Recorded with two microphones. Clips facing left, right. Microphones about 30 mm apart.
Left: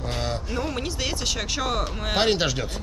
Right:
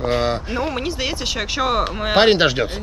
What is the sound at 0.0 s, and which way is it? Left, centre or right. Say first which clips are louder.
Speech: right 9 dB; right.